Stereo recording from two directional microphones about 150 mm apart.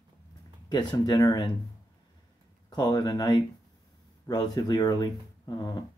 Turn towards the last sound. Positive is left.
turn(degrees=25)  # may be behind; listen again after turning